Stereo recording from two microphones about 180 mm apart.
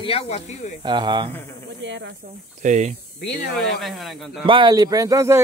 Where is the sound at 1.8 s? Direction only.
90° right.